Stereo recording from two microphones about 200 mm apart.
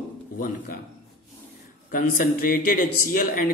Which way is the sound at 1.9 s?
45° left (ahead or behind).